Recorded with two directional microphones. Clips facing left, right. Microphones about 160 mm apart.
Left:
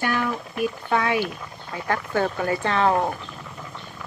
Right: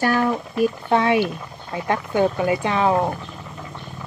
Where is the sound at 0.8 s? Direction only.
25° right (ahead or behind).